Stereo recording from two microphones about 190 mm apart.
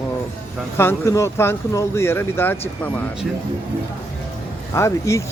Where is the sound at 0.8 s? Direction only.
15° left (ahead or behind).